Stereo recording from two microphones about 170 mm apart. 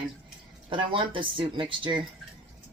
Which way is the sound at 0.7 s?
30° right (ahead or behind).